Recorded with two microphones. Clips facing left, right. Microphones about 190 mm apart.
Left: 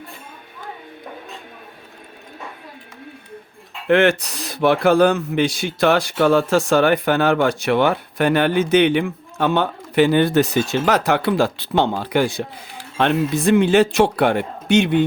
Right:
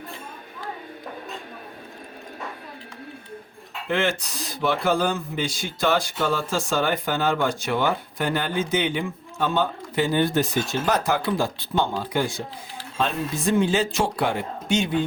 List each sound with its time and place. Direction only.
3.8 s speech: 65° left (ahead or behind)